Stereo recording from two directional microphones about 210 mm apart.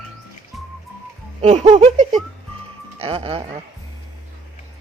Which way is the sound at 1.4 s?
30° right (ahead or behind).